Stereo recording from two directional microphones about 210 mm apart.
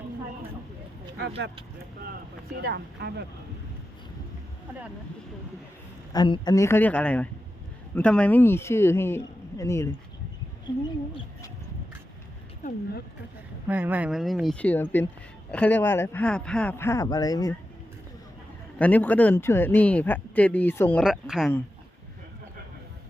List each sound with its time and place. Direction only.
2.6 s speech: 50° right (ahead or behind)
6.1 s speech: 20° left (ahead or behind)
13.7 s speech: 10° right (ahead or behind); by 17.5 s 20° left (ahead or behind)
18.8 s speech: 5° left (ahead or behind)